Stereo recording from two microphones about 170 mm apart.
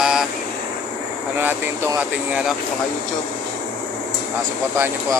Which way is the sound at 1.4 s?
10° right (ahead or behind).